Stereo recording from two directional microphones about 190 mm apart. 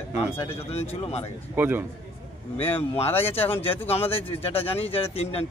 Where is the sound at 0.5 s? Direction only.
35° left (ahead or behind).